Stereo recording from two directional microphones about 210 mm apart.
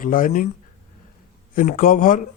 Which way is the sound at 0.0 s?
40° left (ahead or behind).